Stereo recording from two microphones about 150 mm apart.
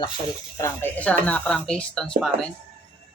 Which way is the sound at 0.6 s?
20° left (ahead or behind).